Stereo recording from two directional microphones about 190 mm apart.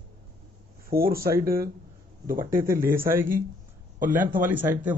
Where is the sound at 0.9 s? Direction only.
50° right (ahead or behind).